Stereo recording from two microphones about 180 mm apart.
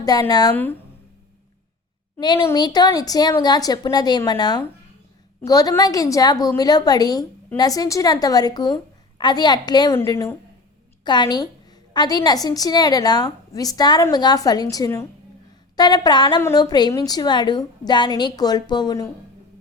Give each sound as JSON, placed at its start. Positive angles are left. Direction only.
{"t": 0.0, "sound": "a woman's voice", "side_deg": 20}
{"t": 0.5, "sound": "speech", "side_deg": 10}
{"t": 2.2, "sound": "a woman's voice", "side_deg": 25}